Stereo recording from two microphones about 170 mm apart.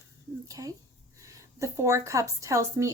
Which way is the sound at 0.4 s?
20° right (ahead or behind).